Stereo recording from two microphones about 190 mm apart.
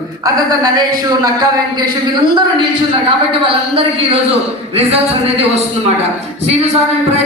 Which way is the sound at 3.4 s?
30° right (ahead or behind).